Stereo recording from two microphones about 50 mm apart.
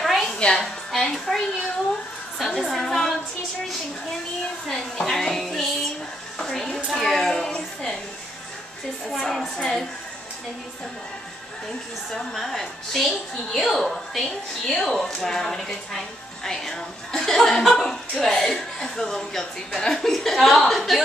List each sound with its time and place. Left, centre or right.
0.0 s a sound: centre
0.4 s a woman's voice: centre
0.9 s a woman's voice: centre
4.6 s a woman's voice: centre
9.1 s a woman's voice: centre
12.1 s a woman's voice: centre